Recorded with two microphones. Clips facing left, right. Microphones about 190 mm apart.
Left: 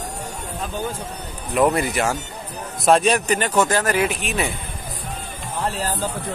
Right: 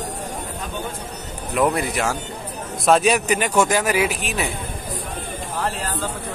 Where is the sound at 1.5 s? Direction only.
Centre (ahead or behind).